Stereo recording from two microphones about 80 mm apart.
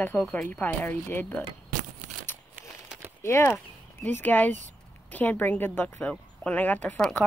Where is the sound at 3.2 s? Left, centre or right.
Left.